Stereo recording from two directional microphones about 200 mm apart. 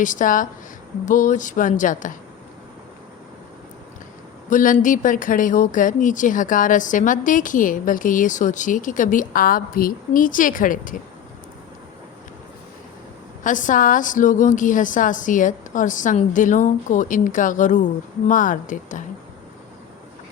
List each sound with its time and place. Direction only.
0.0 s a woman's voice: 40° left (ahead or behind)
4.4 s a woman's voice: 40° left (ahead or behind)
13.4 s a woman's voice: 40° left (ahead or behind)